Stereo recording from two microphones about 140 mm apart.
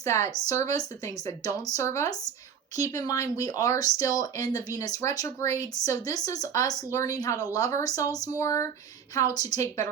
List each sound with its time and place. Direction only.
0.0 s speech: 20° left (ahead or behind)